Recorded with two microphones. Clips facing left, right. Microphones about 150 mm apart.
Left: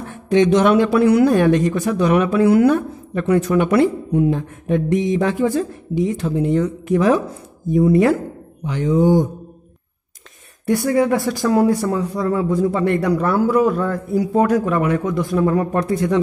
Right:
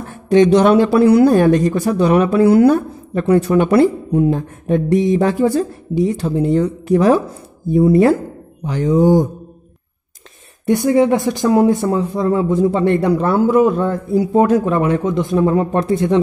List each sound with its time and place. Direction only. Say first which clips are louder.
0.3 s speech: right 3 dB; 35° right (ahead or behind)
10.6 s speech: right 4 dB; 20° right (ahead or behind)